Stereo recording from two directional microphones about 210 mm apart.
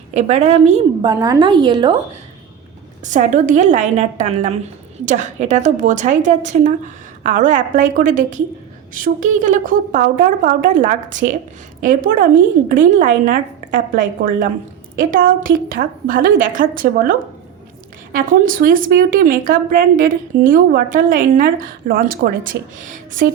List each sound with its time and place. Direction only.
0.1 s a woman's voice: 30° right (ahead or behind)
1.0 s a woman's voice: 20° right (ahead or behind)
3.0 s a woman's voice: 35° right (ahead or behind)